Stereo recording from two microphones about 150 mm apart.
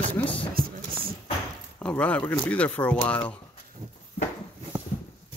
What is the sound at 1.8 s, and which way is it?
Speech, 10° left (ahead or behind).